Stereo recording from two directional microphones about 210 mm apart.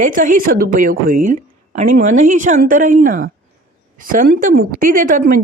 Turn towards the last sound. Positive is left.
turn(degrees=-40)  # may be behind; listen again after turning